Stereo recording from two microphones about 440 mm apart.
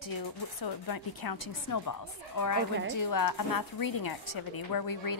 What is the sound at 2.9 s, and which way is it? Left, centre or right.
A woman's voice, left.